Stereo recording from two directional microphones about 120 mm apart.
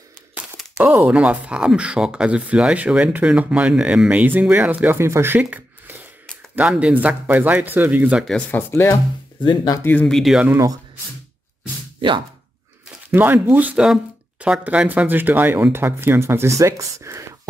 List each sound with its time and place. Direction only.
1.0 s speech: 10° right (ahead or behind)
5.4 s a sound: 15° right (ahead or behind)
6.5 s speech: 10° right (ahead or behind)
8.3 s speech: 15° left (ahead or behind)
9.4 s speech: 40° left (ahead or behind)
9.8 s speech: 15° left (ahead or behind)
10.1 s speech: centre (ahead or behind)
13.1 s speech: 15° right (ahead or behind)